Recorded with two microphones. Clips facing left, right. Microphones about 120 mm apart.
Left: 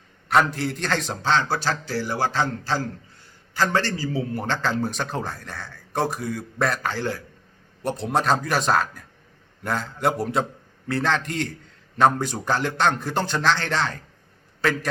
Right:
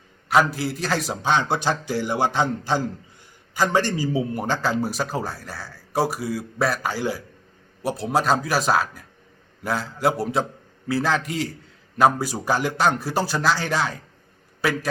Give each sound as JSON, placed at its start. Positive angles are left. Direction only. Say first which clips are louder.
{"t": 0.3, "sound": "a man's voice", "louder": "right 1 dB", "side_deg": -5}